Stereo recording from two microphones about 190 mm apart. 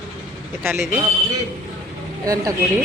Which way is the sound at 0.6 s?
10° right (ahead or behind).